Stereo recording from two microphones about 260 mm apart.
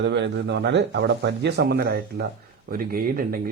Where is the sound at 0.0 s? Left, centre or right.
Right.